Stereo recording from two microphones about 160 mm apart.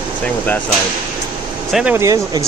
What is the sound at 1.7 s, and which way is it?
Speech, 10° right (ahead or behind).